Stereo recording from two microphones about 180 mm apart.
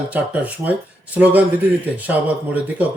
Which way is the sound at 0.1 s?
10° right (ahead or behind).